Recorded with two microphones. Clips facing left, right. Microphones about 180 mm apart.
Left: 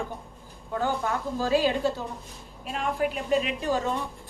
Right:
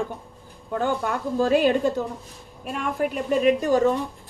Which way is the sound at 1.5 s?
60° right (ahead or behind).